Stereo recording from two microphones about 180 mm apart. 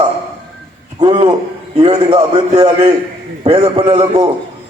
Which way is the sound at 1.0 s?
30° right (ahead or behind).